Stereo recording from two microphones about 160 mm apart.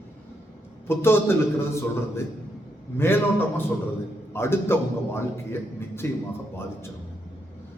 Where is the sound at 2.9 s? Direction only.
15° left (ahead or behind).